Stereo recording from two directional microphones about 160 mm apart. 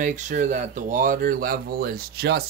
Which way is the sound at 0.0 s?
50° right (ahead or behind).